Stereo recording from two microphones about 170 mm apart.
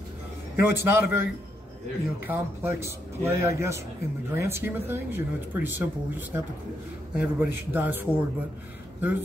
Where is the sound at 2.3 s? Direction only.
15° right (ahead or behind).